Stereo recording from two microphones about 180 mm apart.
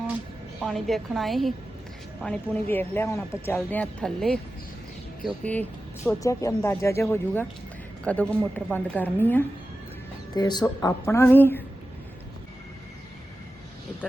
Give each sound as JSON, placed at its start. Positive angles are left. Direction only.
{"t": 0.6, "sound": "a woman's voice", "side_deg": 0}
{"t": 10.3, "sound": "speech", "side_deg": 20}